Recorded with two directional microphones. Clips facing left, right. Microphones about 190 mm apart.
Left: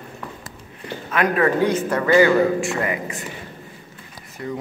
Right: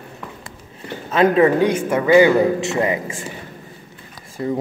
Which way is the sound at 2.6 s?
25° right (ahead or behind).